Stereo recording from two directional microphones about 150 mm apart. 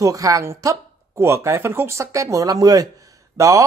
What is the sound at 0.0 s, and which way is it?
Speech, 20° right (ahead or behind).